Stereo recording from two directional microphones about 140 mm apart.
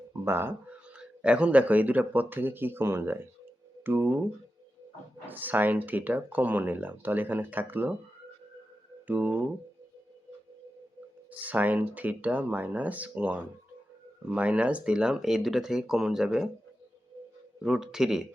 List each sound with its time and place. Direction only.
0.3 s speech: 15° right (ahead or behind)
5.2 s speech: 15° right (ahead or behind)
9.0 s speech: 10° right (ahead or behind)
11.3 s speech: 10° right (ahead or behind)
17.6 s speech: 5° right (ahead or behind)